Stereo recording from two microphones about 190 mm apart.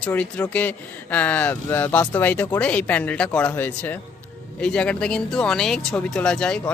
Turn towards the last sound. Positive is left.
turn(degrees=5)  # may be behind; listen again after turning